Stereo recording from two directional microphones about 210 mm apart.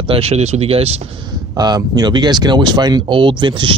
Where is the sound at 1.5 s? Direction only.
15° right (ahead or behind).